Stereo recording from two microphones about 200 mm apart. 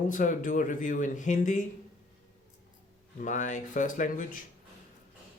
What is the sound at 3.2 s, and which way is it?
Speech, 40° left (ahead or behind).